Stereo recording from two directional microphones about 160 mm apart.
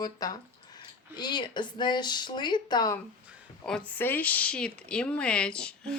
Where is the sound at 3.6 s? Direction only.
5° left (ahead or behind).